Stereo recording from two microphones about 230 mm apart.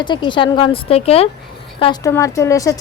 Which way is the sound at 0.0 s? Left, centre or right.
Centre.